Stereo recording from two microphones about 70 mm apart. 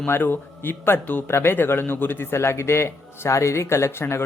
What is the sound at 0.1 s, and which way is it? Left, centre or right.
Speech, left.